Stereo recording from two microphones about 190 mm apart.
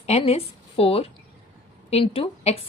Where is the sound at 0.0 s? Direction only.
35° left (ahead or behind).